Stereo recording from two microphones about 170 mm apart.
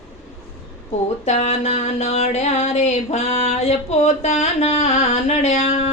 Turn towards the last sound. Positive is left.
turn(degrees=40)  # may be behind; listen again after turning